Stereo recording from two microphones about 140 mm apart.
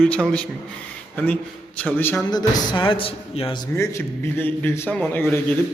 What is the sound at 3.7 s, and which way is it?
A man's voice, 20° left (ahead or behind).